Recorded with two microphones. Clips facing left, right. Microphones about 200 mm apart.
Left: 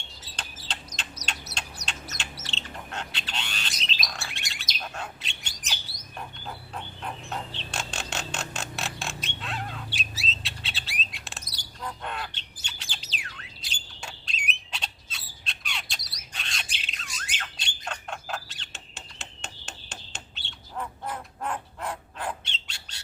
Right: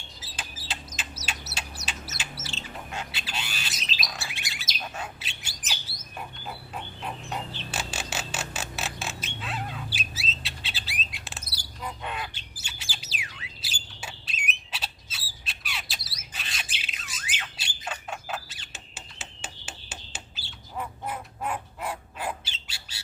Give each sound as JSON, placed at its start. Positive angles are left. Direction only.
{"t": 0.2, "sound": "bird", "side_deg": -5}
{"t": 1.2, "sound": "bird", "side_deg": 15}
{"t": 1.5, "sound": "bird", "side_deg": -5}
{"t": 14.0, "sound": "squawk", "side_deg": -5}